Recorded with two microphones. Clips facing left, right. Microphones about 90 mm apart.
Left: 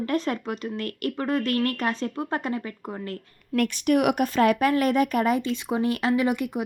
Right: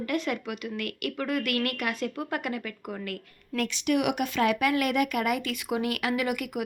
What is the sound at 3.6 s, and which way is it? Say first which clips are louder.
Speech: left 5 dB; 45° left (ahead or behind).